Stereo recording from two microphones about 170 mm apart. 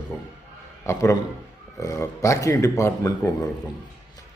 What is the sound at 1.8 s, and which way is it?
Speech, 20° left (ahead or behind).